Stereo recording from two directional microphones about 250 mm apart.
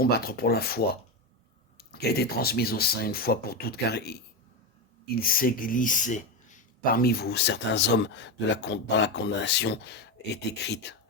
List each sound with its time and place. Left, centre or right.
0.0 s speech: left